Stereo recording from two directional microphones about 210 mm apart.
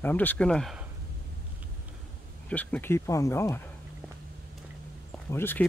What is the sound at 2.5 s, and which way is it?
Speech, 5° left (ahead or behind).